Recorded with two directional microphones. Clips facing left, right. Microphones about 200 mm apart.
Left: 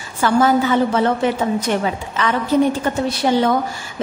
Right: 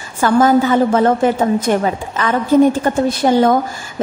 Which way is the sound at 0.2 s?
50° right (ahead or behind).